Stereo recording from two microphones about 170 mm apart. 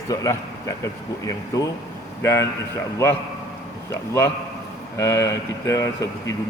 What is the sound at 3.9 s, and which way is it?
Speech, 15° left (ahead or behind).